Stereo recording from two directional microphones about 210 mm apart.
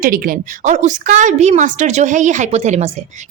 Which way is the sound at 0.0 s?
40° right (ahead or behind).